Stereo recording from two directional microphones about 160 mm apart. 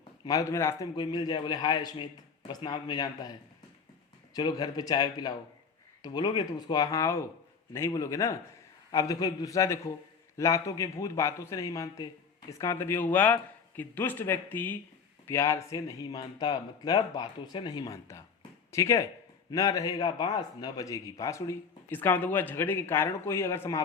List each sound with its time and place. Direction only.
0.3 s a man's voice: 20° left (ahead or behind)
0.9 s a man's voice: 30° left (ahead or behind)
4.4 s a man's voice: 25° left (ahead or behind)